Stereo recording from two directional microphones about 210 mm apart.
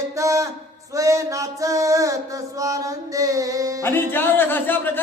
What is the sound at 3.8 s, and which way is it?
Speech, 10° left (ahead or behind).